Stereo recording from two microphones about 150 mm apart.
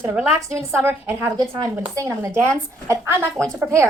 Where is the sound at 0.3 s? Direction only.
20° right (ahead or behind).